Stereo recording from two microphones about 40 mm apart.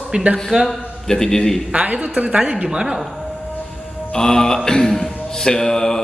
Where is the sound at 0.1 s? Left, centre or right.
Right.